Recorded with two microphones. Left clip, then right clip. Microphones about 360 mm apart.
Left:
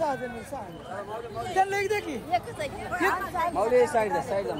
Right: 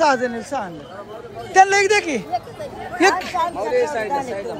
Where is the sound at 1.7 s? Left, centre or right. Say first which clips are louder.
Right 11 dB; centre.